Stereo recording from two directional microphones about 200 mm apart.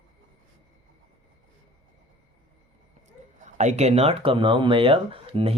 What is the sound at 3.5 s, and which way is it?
Speech, 35° right (ahead or behind).